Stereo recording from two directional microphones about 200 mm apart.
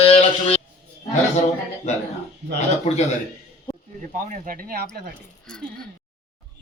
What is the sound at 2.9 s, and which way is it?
Mantra, 35° left (ahead or behind).